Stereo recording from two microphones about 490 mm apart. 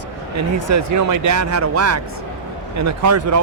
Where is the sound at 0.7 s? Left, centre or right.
Right.